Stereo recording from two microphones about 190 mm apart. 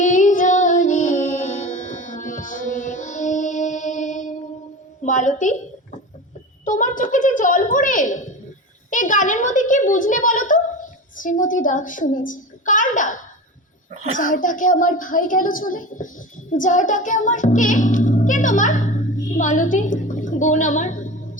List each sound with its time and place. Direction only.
0.0 s music: 40° left (ahead or behind)
5.0 s a woman's voice: 40° left (ahead or behind)
6.7 s a woman's voice: 45° left (ahead or behind)
13.9 s a child's voice: 40° right (ahead or behind)
14.2 s a woman's voice: 45° left (ahead or behind)
16.5 s music: 40° left (ahead or behind)
19.4 s a woman's voice: 40° left (ahead or behind)